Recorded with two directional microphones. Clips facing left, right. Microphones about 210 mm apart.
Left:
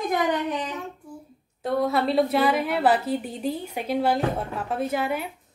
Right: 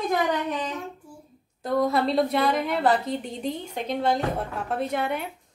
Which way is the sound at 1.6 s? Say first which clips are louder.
Even; centre (ahead or behind).